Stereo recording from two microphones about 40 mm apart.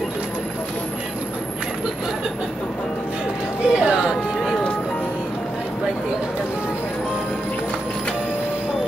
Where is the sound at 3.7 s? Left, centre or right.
Centre.